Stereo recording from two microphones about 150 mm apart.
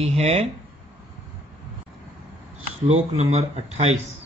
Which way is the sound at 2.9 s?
45° right (ahead or behind).